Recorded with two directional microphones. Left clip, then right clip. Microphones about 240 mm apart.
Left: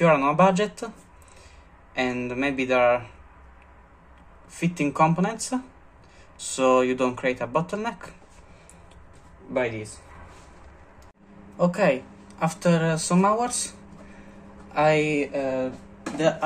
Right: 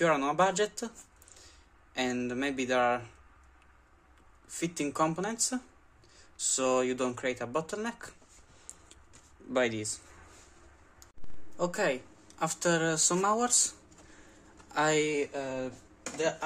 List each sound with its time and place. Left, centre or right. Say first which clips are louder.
0.0 s speech: left 8 dB; right
2.0 s speech: left 6 dB; right
4.5 s speech: left 7 dB; right
9.5 s speech: left 3 dB; right
11.5 s speech: left 9 dB; right